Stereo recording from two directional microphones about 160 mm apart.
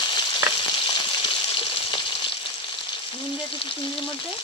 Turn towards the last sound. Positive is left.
turn(degrees=35)  # may be behind; listen again after turning